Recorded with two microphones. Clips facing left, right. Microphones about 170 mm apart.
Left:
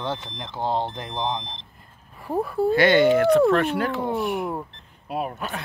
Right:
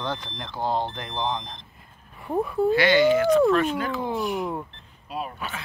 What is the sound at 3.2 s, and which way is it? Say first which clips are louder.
Speech: left 1 dB; 65° left (ahead or behind).